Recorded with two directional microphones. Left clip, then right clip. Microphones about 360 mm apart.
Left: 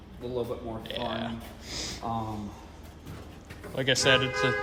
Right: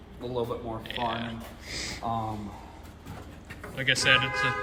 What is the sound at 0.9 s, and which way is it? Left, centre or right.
Speech, centre.